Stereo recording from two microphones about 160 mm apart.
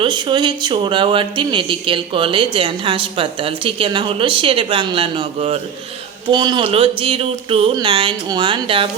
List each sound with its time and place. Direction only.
0.0 s speech: 30° right (ahead or behind)